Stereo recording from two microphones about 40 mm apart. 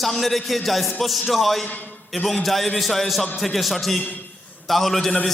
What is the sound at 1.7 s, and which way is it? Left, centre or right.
Speech, left.